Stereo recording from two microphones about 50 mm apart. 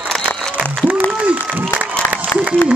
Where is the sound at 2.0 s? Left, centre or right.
Left.